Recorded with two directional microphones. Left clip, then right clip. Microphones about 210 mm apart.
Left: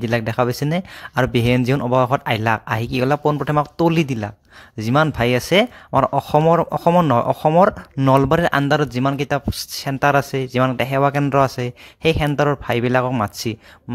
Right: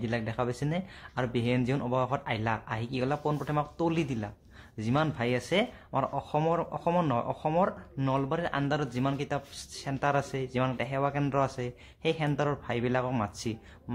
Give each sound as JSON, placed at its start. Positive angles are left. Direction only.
{"t": 0.0, "sound": "speech", "side_deg": 45}